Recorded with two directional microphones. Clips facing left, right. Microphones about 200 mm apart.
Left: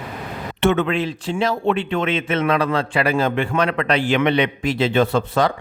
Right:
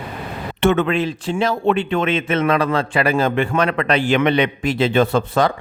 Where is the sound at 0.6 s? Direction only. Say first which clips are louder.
Right 2 dB; 50° right (ahead or behind).